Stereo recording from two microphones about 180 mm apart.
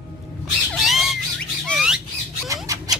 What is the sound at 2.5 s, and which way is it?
Squawk, 20° right (ahead or behind).